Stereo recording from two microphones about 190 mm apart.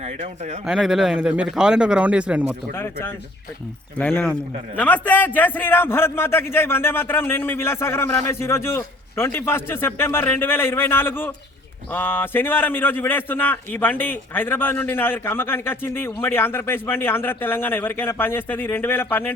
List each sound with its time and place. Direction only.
0.0 s speech: 35° right (ahead or behind)
0.6 s speech: centre (ahead or behind)
2.7 s a man's voice: 10° left (ahead or behind)